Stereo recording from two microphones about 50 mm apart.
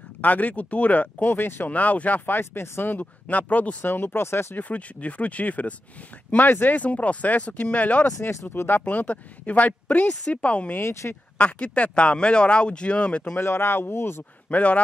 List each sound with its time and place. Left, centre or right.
0.2 s speech: left
2.3 s speech: left
2.9 s speech: left
3.8 s speech: left
4.6 s speech: left
8.2 s speech: left
8.5 s speech: left
8.8 s speech: left
10.8 s speech: left
11.3 s speech: left
13.4 s speech: left
14.5 s speech: left